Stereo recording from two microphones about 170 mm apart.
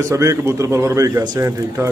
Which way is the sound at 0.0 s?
15° right (ahead or behind).